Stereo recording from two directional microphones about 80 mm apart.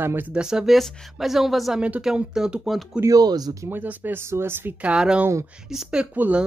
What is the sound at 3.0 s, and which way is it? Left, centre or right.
Speech, right.